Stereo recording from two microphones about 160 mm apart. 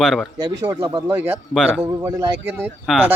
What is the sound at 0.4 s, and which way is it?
Speech, 25° right (ahead or behind).